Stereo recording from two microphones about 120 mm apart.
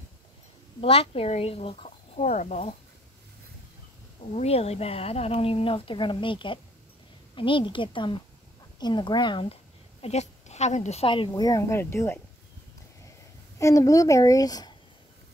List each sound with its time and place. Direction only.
0.7 s a woman's voice: 50° left (ahead or behind); by 2.7 s 75° left (ahead or behind)
4.3 s a woman's voice: 60° left (ahead or behind); by 9.6 s 45° left (ahead or behind)
10.0 s speech: 65° left (ahead or behind)
11.1 s a woman's voice: 45° left (ahead or behind)
11.4 s a woman's voice: 25° left (ahead or behind)
13.6 s a woman's voice: 25° left (ahead or behind)